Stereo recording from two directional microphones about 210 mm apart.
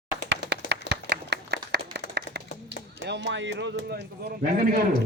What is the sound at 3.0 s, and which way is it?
Speech, 60° right (ahead or behind).